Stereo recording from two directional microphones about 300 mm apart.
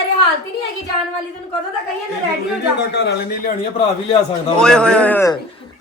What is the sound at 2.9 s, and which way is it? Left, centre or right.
Speech, left.